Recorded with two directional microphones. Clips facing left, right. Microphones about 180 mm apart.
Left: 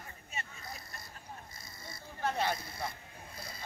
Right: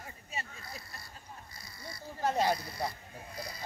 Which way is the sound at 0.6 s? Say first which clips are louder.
Even; 20° left (ahead or behind).